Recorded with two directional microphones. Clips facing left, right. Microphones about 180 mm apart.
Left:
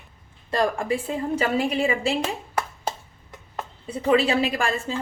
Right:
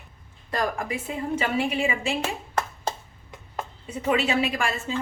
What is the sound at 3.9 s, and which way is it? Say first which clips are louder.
Speech: left 4 dB; 30° left (ahead or behind).